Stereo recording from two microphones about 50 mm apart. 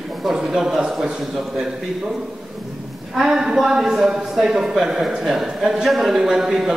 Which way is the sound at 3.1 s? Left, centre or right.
Centre.